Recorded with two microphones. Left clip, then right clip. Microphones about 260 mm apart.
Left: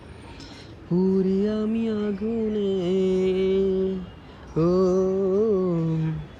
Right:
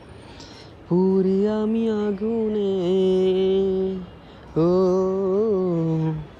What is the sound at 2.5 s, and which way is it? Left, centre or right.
Mantra, right.